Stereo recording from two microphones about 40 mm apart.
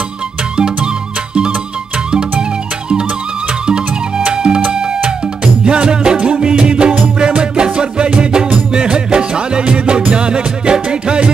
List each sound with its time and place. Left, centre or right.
0.8 s music: right
3.6 s music: right